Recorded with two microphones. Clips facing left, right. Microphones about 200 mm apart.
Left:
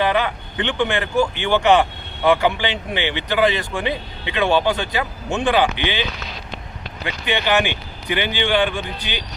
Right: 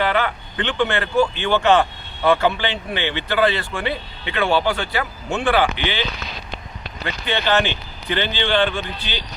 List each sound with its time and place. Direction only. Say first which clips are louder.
0.0 s speech: left 1 dB; 15° left (ahead or behind)